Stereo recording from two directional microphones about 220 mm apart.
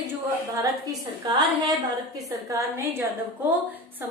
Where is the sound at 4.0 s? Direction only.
10° right (ahead or behind).